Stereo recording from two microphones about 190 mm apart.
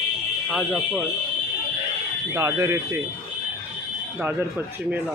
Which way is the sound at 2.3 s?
20° right (ahead or behind).